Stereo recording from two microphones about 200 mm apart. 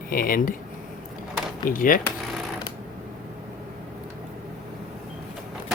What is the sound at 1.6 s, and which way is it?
Speech, 45° left (ahead or behind).